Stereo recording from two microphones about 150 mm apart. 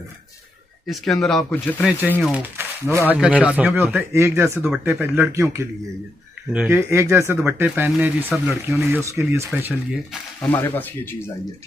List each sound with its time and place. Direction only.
1.2 s speech: 5° left (ahead or behind)
2.0 s speech: 15° right (ahead or behind)
10.4 s speech: 15° left (ahead or behind)